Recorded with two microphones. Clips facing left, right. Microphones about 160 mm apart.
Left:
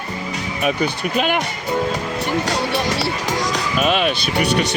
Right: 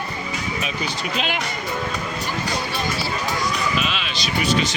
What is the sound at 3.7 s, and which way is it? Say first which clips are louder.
Speech: left 8 dB; 50° left (ahead or behind).